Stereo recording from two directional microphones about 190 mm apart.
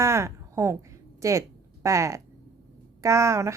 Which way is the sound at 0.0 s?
15° right (ahead or behind).